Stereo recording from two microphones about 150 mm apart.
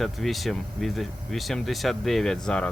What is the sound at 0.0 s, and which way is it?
Speech, centre (ahead or behind).